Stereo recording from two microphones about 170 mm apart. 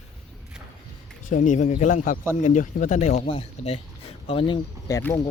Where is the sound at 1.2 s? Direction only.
50° left (ahead or behind); by 4.6 s 30° left (ahead or behind).